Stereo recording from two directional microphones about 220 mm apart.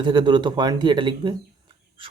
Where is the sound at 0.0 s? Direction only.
20° right (ahead or behind).